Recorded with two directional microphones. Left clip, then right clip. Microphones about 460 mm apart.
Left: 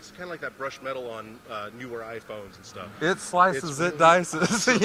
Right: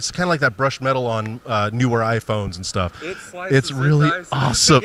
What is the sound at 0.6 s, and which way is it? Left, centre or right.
Speech, right.